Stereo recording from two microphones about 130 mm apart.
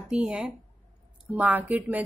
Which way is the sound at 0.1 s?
5° right (ahead or behind).